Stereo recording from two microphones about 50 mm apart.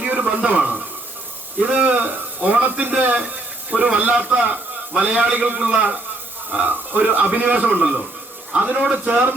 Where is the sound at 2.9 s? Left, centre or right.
Right.